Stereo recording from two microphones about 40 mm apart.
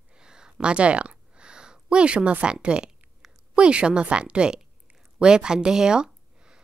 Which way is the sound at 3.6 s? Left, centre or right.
Right.